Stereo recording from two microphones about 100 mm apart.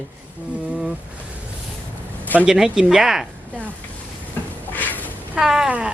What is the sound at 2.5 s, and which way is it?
Speech, 5° right (ahead or behind).